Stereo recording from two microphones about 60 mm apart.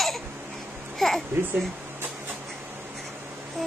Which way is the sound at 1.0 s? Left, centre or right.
Centre.